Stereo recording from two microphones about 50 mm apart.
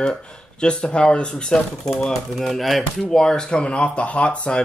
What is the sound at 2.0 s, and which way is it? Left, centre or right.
Speech, centre.